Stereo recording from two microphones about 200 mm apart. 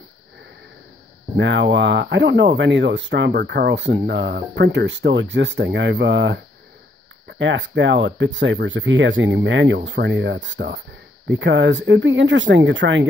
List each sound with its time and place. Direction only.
1.3 s speech: 65° right (ahead or behind)